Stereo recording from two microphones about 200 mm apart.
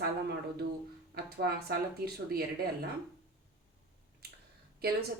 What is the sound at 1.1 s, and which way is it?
Music, 50° right (ahead or behind).